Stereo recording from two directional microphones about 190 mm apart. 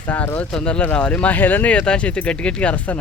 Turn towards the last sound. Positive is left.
turn(degrees=5)  # may be behind; listen again after turning